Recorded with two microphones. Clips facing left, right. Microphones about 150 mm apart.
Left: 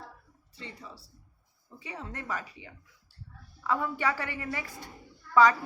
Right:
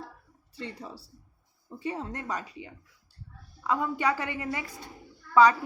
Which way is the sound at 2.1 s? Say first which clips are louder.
Right 2 dB; 20° right (ahead or behind).